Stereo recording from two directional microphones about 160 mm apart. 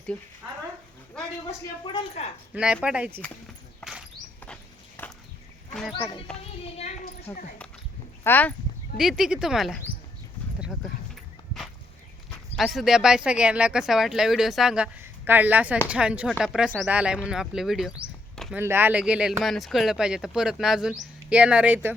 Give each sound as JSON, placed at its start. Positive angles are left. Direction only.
{"t": 1.5, "sound": "a woman's voice", "side_deg": 30}
{"t": 2.5, "sound": "speech", "side_deg": -5}
{"t": 3.8, "sound": "a sound", "side_deg": 5}
{"t": 5.0, "sound": "a sound", "side_deg": 15}
{"t": 7.3, "sound": "speech", "side_deg": 10}
{"t": 9.0, "sound": "speech", "side_deg": 0}
{"t": 10.6, "sound": "horse", "side_deg": 0}
{"t": 12.5, "sound": "speech", "side_deg": 0}
{"t": 18.5, "sound": "speech", "side_deg": -15}